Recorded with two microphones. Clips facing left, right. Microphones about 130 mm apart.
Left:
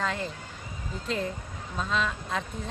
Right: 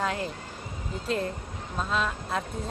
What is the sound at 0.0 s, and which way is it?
Speech, 5° right (ahead or behind).